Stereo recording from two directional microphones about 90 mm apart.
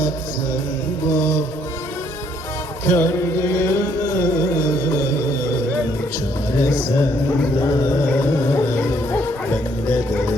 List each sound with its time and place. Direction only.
1.1 s music: 35° left (ahead or behind)
2.8 s music: 30° left (ahead or behind)
8.0 s music: 25° left (ahead or behind)